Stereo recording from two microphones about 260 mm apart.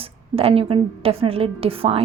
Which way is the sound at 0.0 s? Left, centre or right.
Right.